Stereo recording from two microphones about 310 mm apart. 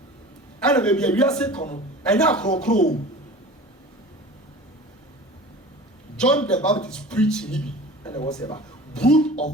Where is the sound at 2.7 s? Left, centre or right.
Left.